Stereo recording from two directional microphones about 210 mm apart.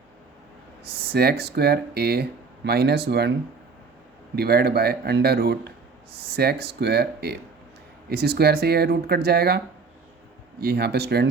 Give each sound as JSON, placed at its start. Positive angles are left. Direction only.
{"t": 1.1, "sound": "speech", "side_deg": -50}
{"t": 4.4, "sound": "speech", "side_deg": -50}
{"t": 10.6, "sound": "speech", "side_deg": -50}